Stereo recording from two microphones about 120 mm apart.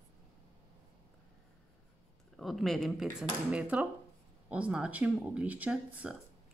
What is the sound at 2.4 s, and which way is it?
Speech, centre (ahead or behind).